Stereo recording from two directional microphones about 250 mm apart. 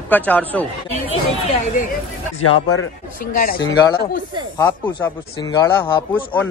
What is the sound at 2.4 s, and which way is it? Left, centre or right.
Speech, left.